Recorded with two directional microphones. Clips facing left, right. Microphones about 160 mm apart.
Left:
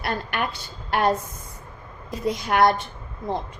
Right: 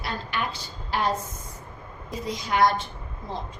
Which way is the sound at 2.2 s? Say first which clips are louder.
Left 3 dB; 60° left (ahead or behind).